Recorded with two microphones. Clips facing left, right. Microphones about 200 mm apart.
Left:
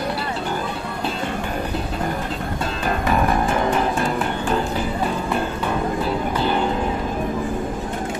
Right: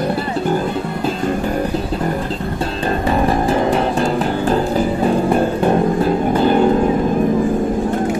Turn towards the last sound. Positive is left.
turn(degrees=-45)  # may be behind; listen again after turning